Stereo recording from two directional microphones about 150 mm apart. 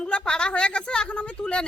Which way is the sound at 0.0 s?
5° left (ahead or behind).